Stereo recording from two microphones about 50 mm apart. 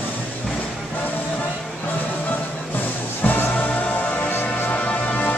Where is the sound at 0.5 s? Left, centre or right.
Left.